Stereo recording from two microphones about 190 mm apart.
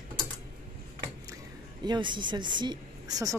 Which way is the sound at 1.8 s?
25° right (ahead or behind).